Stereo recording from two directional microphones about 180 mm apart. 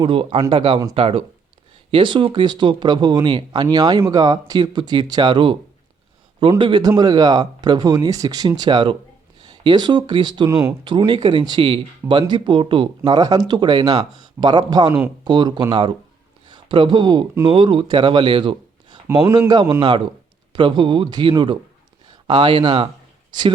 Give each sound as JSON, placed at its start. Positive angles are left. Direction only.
{"t": 0.0, "sound": "speech", "side_deg": -30}